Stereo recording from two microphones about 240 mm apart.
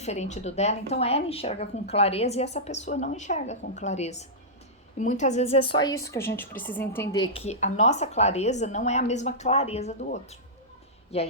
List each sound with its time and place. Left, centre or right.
0.0 s a woman's voice: left